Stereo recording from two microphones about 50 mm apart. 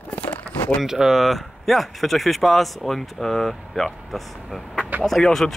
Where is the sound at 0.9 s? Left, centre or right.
Centre.